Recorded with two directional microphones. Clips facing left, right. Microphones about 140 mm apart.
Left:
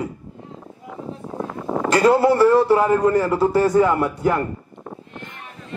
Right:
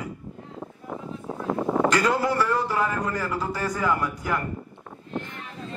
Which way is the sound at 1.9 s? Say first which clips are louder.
Left 8 dB; 30° left (ahead or behind).